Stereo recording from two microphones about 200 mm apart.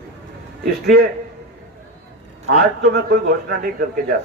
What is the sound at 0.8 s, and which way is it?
Speech, 50° right (ahead or behind).